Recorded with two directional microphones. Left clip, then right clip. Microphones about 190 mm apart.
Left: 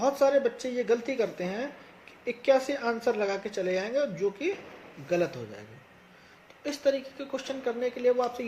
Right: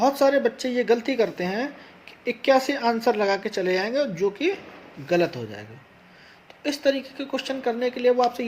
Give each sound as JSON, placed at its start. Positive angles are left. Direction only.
{"t": 0.0, "sound": "speech", "side_deg": -45}